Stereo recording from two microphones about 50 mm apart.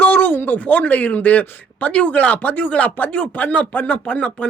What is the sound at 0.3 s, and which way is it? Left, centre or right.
Speech, left.